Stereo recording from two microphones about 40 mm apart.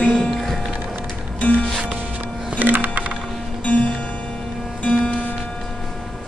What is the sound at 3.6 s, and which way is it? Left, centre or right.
Music, left.